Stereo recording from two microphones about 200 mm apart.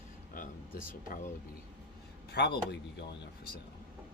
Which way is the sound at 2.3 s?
55° left (ahead or behind).